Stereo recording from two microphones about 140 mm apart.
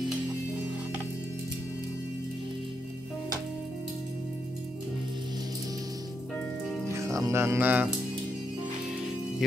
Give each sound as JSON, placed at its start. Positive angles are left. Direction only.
{"t": 7.1, "sound": "speech", "side_deg": -20}